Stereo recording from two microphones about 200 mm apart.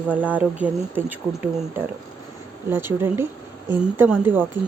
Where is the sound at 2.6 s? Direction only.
10° right (ahead or behind).